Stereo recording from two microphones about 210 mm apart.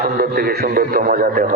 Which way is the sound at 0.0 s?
45° right (ahead or behind).